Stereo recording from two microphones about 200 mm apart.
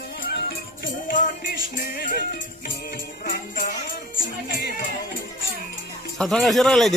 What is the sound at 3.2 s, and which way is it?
Music, 45° left (ahead or behind).